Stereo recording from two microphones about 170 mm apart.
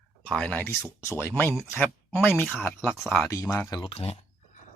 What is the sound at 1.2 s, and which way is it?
Speech, 10° left (ahead or behind).